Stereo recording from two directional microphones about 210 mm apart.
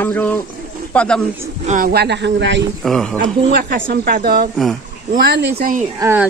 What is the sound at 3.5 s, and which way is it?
A woman's voice, 50° right (ahead or behind).